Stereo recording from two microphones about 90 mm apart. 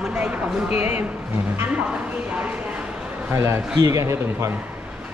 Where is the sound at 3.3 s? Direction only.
30° right (ahead or behind).